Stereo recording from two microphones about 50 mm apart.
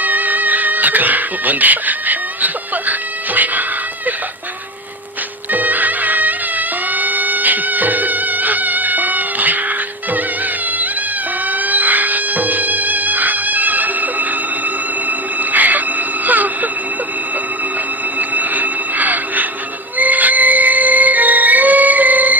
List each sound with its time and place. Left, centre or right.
0.0 s music: right
5.5 s music: right
18.2 s music: right